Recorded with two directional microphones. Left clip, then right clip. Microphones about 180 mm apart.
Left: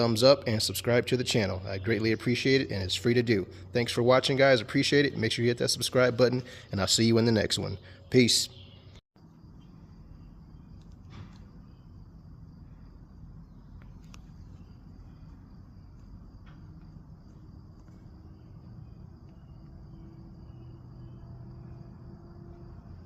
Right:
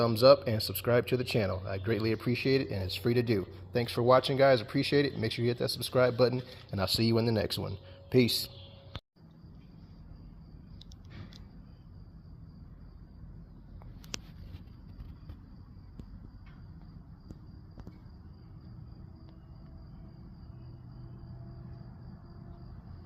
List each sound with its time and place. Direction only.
0.0 s speech: 25° left (ahead or behind)